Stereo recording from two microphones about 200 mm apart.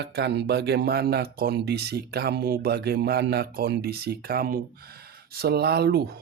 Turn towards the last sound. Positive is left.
turn(degrees=-55)  # may be behind; listen again after turning